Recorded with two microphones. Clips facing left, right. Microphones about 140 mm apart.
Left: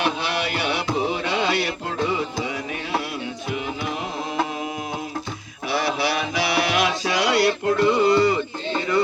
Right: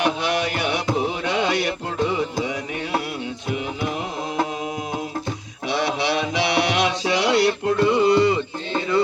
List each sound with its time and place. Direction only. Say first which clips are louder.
5.7 s music: right 1 dB; 25° right (ahead or behind)